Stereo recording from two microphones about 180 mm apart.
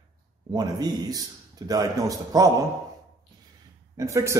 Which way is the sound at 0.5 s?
20° right (ahead or behind).